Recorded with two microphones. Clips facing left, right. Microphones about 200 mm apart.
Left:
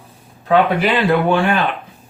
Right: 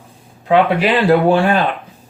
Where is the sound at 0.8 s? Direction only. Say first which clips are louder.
Right 3 dB; 30° right (ahead or behind).